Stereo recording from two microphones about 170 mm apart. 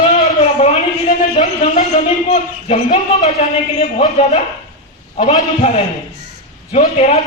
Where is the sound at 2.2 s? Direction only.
40° left (ahead or behind).